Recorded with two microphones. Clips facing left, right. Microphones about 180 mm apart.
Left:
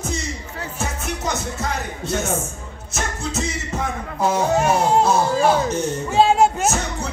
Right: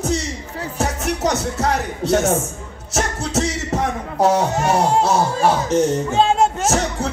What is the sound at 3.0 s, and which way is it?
Music, 80° right.